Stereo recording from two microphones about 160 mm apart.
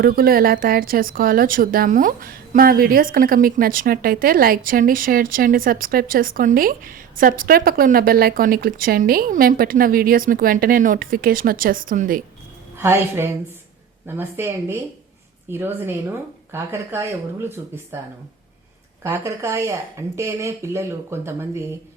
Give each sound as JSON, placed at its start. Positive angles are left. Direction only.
{"t": 0.0, "sound": "a woman's voice", "side_deg": -65}
{"t": 12.8, "sound": "speech", "side_deg": -15}
{"t": 19.0, "sound": "speech", "side_deg": -20}